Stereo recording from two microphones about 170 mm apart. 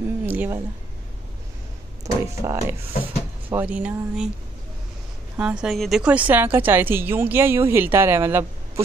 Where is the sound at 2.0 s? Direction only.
20° right (ahead or behind).